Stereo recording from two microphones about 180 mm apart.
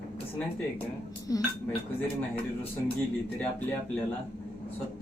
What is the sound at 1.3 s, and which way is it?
Speech, 20° left (ahead or behind).